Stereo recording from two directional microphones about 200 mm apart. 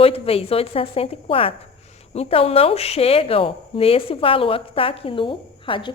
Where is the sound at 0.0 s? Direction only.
30° left (ahead or behind).